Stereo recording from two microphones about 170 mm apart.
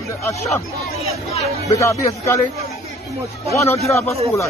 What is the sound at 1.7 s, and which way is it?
Speech, 15° left (ahead or behind).